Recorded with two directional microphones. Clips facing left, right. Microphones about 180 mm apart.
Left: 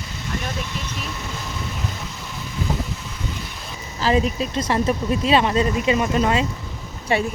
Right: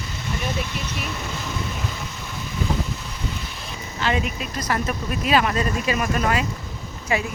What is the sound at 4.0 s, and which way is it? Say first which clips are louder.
Speech: left 5 dB; 35° left (ahead or behind).